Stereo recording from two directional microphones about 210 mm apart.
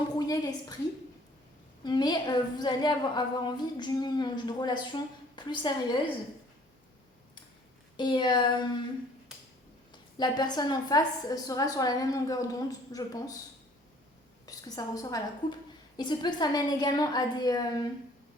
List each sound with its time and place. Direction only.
0.2 s a woman's voice: 20° left (ahead or behind)
1.8 s a woman's voice: 20° left (ahead or behind)
7.9 s a woman's voice: 20° left (ahead or behind)
9.9 s a woman's voice: 20° left (ahead or behind)
14.4 s a woman's voice: 15° left (ahead or behind)